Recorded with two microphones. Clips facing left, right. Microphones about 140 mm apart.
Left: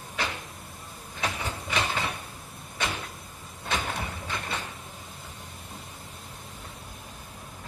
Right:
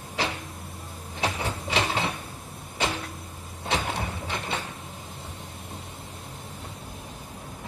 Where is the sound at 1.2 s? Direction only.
30° right (ahead or behind).